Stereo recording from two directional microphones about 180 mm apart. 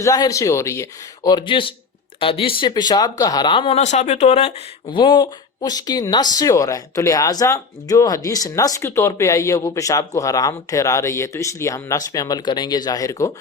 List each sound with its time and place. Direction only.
0.0 s speech: 20° left (ahead or behind); by 4.9 s 35° left (ahead or behind)
4.9 s speech: 25° left (ahead or behind)